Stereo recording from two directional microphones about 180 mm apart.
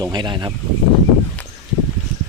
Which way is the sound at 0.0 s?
25° right (ahead or behind).